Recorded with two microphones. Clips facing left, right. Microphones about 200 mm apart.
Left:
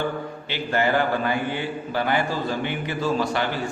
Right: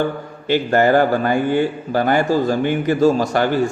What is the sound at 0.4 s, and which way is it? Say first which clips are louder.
A man's voice: right 9 dB; 45° right (ahead or behind).